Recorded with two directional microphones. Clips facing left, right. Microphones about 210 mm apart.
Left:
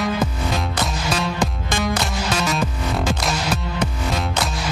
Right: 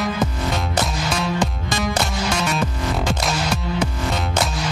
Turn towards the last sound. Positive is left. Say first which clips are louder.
# right 1 dB
turn(degrees=0)  # may be behind; listen again after turning